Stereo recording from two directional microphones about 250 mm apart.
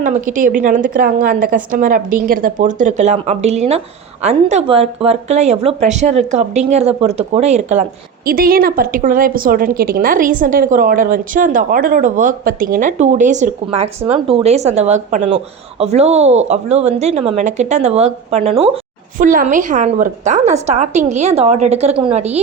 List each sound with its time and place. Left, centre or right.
0.0 s a woman's voice: right